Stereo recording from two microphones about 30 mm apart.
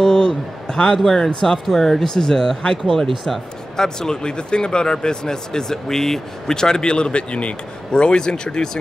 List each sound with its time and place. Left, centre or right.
0.0 s a sound: left
0.7 s a man's voice: left
1.7 s speech: centre; by 7.5 s left
7.9 s speech: left